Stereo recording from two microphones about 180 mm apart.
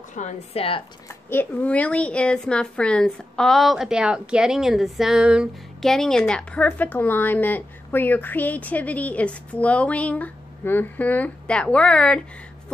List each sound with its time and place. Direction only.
0.1 s speech: 40° left (ahead or behind)
1.0 s a woman's voice: 10° left (ahead or behind)